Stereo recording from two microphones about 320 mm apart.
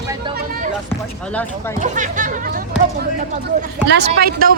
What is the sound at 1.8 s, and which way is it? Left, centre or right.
Speech, right.